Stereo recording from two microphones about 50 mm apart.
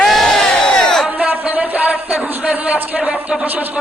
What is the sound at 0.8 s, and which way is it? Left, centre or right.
Crowd, centre.